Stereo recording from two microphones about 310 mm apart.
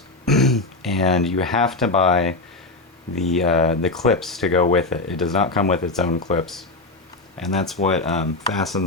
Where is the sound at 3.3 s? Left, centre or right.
Centre.